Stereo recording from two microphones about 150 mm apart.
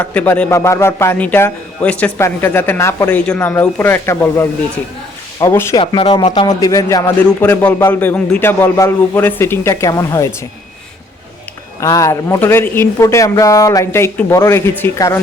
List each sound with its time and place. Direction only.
0.0 s a man's voice: 10° left (ahead or behind)
5.7 s a man's voice: 30° left (ahead or behind)
11.8 s a man's voice: 20° left (ahead or behind)